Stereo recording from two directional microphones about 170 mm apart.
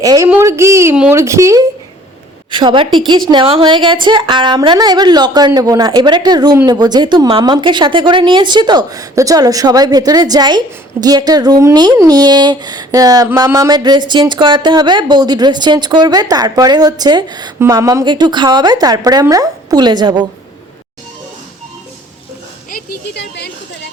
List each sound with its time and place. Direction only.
0.0 s a woman's voice: 20° right (ahead or behind)
0.9 s speech: 5° right (ahead or behind)
1.2 s a woman's voice: 15° right (ahead or behind)
2.5 s speech: 25° right (ahead or behind)
23.1 s a woman's voice: 80° left